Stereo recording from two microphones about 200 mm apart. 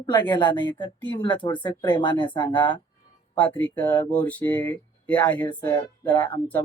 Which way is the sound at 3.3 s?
10° left (ahead or behind).